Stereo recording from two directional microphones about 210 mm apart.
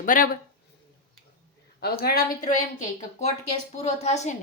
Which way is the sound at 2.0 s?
45° left (ahead or behind).